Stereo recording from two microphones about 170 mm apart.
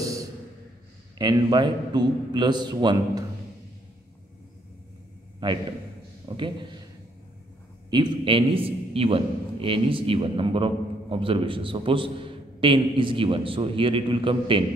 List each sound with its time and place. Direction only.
0.0 s a sound: 20° right (ahead or behind)
1.1 s a man's voice: 25° right (ahead or behind)
5.4 s a man's voice: 30° right (ahead or behind)
7.9 s a man's voice: 30° right (ahead or behind)